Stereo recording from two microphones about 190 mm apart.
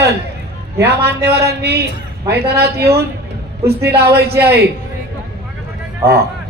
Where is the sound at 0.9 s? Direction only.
60° right (ahead or behind).